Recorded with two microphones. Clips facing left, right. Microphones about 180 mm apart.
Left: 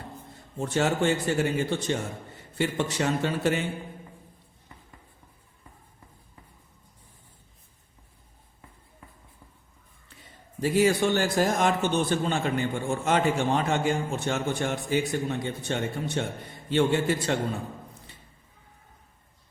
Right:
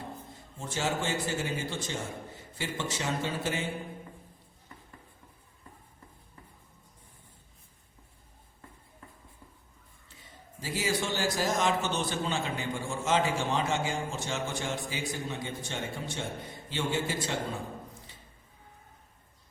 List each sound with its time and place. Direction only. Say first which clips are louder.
0.6 s a man's voice: left 8 dB; 60° left (ahead or behind)
10.6 s a man's voice: left 10 dB; 60° left (ahead or behind)